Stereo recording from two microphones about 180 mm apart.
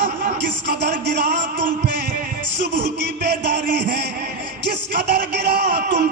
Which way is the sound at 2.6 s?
70° right (ahead or behind).